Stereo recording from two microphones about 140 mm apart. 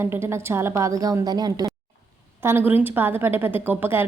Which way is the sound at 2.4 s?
15° right (ahead or behind).